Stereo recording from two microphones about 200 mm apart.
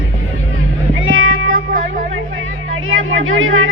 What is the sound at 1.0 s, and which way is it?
Meow, 80° right.